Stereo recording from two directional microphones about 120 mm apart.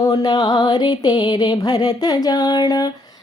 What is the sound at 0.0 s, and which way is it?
Music, 35° left (ahead or behind).